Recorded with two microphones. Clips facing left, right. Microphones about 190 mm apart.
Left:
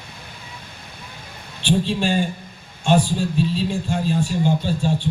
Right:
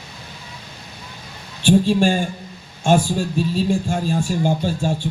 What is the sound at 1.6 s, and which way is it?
A man's voice, 45° right (ahead or behind).